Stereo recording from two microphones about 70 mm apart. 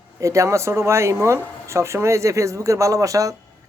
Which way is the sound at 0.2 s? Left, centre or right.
Right.